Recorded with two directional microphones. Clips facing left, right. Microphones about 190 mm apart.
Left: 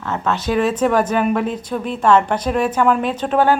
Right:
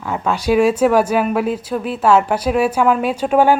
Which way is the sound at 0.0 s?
10° right (ahead or behind).